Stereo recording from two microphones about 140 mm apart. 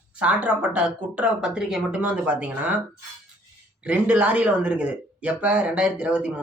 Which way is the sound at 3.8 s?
10° right (ahead or behind).